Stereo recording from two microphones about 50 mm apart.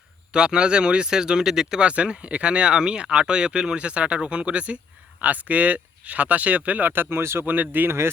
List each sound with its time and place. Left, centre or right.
0.3 s speech: centre
1.8 s speech: right
7.4 s speech: right
7.9 s speech: right